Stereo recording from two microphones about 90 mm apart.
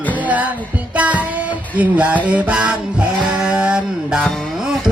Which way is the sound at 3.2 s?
15° right (ahead or behind).